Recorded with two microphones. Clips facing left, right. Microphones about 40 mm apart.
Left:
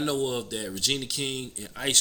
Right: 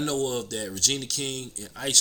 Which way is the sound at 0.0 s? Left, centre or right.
Centre.